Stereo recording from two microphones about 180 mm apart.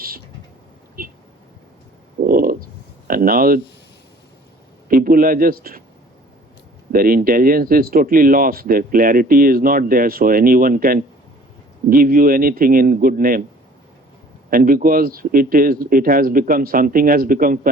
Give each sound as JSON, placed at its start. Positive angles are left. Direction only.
{"t": 1.0, "sound": "a sound", "side_deg": -50}
{"t": 2.2, "sound": "a sound", "side_deg": -55}
{"t": 3.1, "sound": "speech", "side_deg": -55}
{"t": 4.9, "sound": "a man's voice", "side_deg": -50}
{"t": 6.9, "sound": "speech", "side_deg": -55}
{"t": 14.5, "sound": "speech", "side_deg": -50}